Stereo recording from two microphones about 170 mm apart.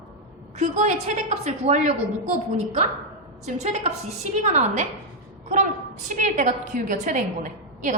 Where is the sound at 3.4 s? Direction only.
40° right (ahead or behind).